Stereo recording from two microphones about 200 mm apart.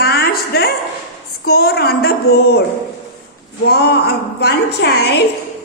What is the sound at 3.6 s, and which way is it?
A woman's voice, 55° left (ahead or behind).